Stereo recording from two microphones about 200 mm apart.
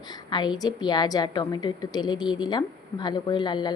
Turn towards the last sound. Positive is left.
turn(degrees=20)  # may be behind; listen again after turning